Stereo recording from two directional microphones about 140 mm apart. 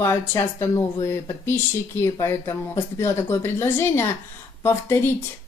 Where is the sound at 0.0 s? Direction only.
20° left (ahead or behind).